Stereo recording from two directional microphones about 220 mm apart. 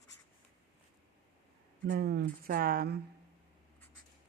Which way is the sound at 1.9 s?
45° right (ahead or behind).